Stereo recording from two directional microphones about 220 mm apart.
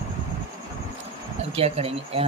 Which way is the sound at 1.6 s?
25° right (ahead or behind).